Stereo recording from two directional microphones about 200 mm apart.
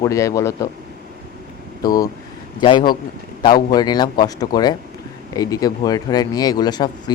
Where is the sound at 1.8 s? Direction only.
20° left (ahead or behind).